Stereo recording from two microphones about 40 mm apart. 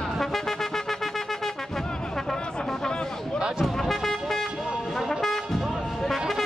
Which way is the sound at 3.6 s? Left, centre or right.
Centre.